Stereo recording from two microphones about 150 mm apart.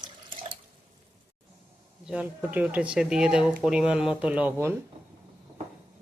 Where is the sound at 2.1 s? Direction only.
10° right (ahead or behind).